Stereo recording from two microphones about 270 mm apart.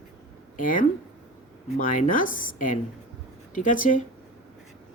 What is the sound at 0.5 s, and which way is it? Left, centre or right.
Speech, left.